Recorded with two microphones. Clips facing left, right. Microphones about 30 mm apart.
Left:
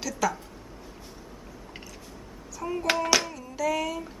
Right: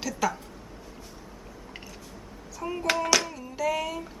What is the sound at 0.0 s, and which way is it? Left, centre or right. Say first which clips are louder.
Speech: even; centre.